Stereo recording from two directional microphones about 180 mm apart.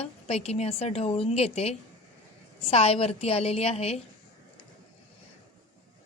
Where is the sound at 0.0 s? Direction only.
35° left (ahead or behind).